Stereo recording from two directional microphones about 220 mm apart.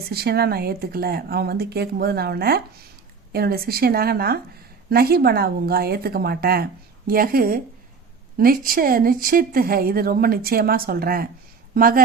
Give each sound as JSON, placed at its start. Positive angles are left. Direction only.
{"t": 0.1, "sound": "speech", "side_deg": -45}